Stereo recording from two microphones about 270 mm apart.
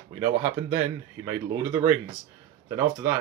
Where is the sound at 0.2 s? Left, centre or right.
Centre.